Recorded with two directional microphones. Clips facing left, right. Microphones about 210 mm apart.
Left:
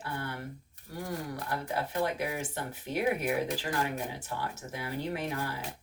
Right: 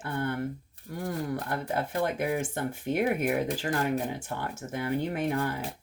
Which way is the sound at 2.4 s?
50° right (ahead or behind).